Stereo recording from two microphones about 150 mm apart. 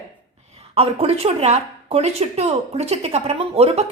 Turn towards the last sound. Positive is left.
turn(degrees=-40)  # may be behind; listen again after turning